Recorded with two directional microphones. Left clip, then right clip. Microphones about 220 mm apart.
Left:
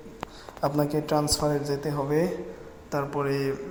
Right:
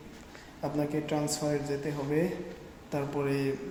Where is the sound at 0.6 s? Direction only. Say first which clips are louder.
Left 6 dB; 15° left (ahead or behind).